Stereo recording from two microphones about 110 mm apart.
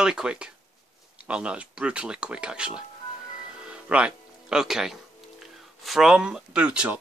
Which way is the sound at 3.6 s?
10° right (ahead or behind).